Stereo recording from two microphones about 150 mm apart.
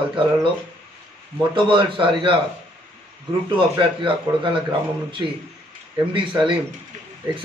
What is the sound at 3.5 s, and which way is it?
A man's voice, 35° right (ahead or behind).